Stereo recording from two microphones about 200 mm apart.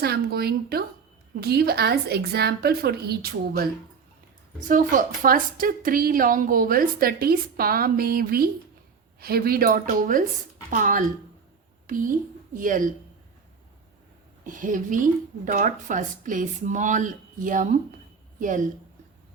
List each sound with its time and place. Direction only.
0.0 s a woman's voice: 50° right (ahead or behind)
4.7 s a woman's voice: 40° right (ahead or behind)
14.4 s a woman's voice: 40° right (ahead or behind)